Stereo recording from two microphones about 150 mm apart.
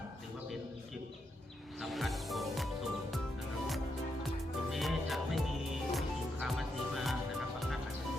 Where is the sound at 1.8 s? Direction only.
Centre (ahead or behind).